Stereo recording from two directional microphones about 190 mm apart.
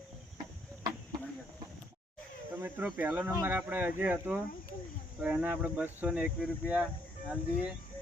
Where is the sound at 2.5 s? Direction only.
10° right (ahead or behind).